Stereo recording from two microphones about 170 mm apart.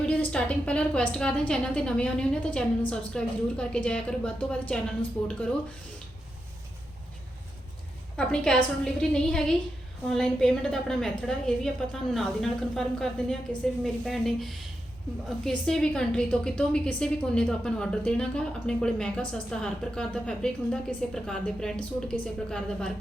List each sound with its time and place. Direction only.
0.0 s a woman's voice: 5° left (ahead or behind)
8.1 s a woman's voice: 5° left (ahead or behind)